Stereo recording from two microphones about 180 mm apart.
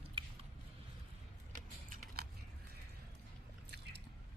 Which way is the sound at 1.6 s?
50° right (ahead or behind).